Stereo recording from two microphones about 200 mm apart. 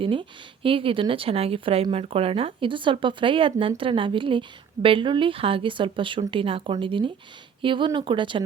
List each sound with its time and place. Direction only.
0.0 s speech: 25° right (ahead or behind)